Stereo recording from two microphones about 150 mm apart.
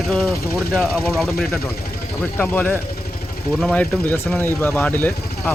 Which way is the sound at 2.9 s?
90° left.